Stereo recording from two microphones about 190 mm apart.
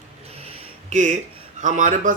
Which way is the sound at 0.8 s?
40° right (ahead or behind).